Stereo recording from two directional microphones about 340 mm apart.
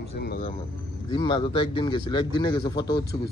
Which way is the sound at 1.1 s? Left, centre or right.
Centre.